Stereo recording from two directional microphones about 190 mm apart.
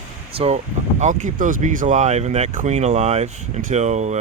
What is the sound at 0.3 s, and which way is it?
Speech, 35° right (ahead or behind).